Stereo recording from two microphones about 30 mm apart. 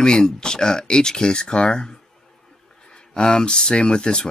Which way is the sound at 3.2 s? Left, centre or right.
Left.